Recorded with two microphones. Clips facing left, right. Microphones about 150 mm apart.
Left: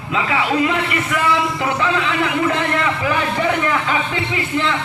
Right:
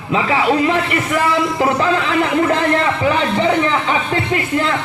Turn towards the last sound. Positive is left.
turn(degrees=-40)  # may be behind; listen again after turning